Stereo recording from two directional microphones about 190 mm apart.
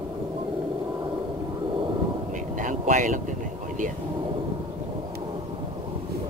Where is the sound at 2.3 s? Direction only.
40° right (ahead or behind).